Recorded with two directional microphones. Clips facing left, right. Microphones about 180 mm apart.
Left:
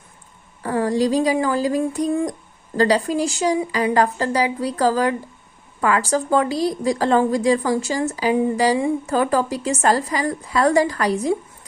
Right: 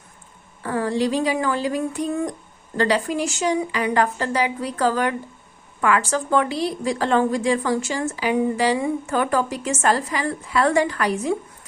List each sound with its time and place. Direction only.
0.6 s a woman's voice: 40° left (ahead or behind)